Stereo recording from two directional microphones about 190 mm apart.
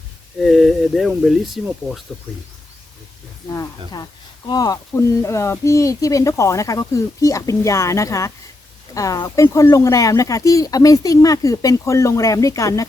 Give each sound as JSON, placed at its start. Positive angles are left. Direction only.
{"t": 0.3, "sound": "speech", "side_deg": 0}
{"t": 4.4, "sound": "speech", "side_deg": 20}